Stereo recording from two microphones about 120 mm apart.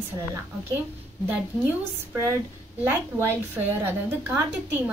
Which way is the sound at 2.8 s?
20° right (ahead or behind).